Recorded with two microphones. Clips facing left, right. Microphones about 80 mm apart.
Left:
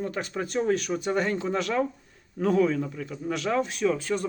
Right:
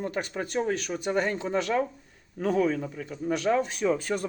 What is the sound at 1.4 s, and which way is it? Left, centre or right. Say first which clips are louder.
A man's voice: even; centre.